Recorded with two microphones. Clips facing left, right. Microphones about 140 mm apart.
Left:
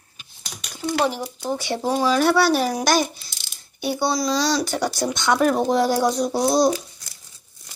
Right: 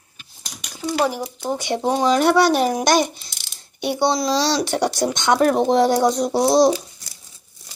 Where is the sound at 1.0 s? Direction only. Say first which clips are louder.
Right 1 dB; 15° right (ahead or behind).